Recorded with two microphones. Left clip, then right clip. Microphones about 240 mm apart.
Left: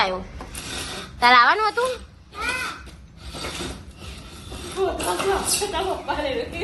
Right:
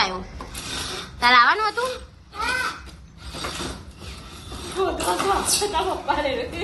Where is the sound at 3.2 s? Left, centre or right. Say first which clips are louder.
Right 1 dB; right.